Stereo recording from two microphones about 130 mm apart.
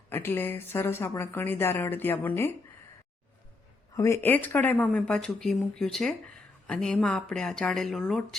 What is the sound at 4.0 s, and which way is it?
Speech, 20° left (ahead or behind).